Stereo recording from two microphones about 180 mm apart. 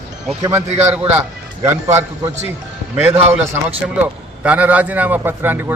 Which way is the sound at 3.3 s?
15° right (ahead or behind).